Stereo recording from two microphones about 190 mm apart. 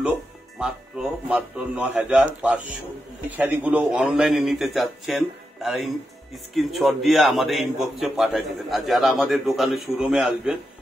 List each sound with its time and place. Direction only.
0.6 s a man's voice: 5° right (ahead or behind)